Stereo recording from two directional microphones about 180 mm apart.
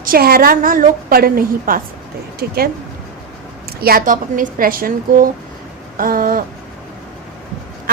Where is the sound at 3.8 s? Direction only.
50° right (ahead or behind).